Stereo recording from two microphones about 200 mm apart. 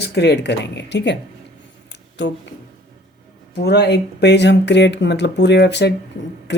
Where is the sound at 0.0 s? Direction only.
55° left (ahead or behind).